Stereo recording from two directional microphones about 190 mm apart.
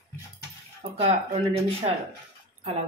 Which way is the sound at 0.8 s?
30° right (ahead or behind).